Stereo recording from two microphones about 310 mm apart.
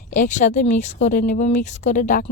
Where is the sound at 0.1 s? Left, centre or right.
Left.